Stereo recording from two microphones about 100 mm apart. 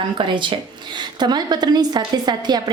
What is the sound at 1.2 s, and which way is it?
A woman's voice, 45° right (ahead or behind).